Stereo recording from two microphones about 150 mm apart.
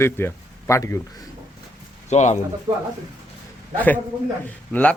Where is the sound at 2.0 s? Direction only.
50° left (ahead or behind).